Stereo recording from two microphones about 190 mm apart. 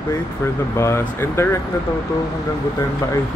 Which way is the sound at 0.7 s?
15° left (ahead or behind).